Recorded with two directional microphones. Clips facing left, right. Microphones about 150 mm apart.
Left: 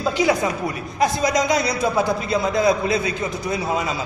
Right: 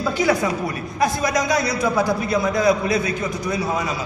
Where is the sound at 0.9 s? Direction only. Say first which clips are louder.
Left 1 dB; 20° left (ahead or behind).